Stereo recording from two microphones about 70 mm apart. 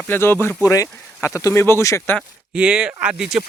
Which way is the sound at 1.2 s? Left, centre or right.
Left.